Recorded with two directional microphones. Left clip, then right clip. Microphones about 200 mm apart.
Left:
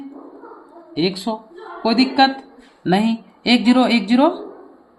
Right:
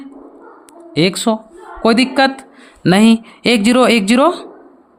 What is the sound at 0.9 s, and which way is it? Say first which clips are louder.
A woman's voice: right 7 dB; 60° right (ahead or behind).